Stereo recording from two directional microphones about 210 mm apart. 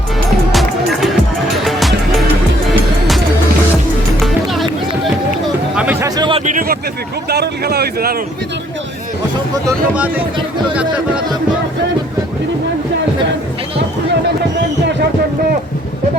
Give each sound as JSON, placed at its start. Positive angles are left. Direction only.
{"t": 0.5, "sound": "music", "side_deg": 0}
{"t": 5.7, "sound": "a sound", "side_deg": -10}
{"t": 6.4, "sound": "speech", "side_deg": -40}
{"t": 9.6, "sound": "speech", "side_deg": -10}